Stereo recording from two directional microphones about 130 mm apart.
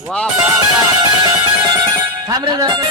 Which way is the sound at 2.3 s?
30° right (ahead or behind).